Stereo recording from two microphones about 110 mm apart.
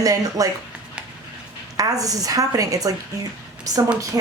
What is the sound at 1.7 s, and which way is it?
A woman's voice, 30° right (ahead or behind).